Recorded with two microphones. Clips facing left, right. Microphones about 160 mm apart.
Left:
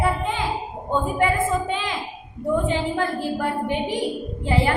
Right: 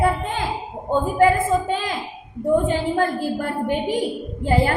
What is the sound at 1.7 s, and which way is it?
A woman's voice, 45° right (ahead or behind).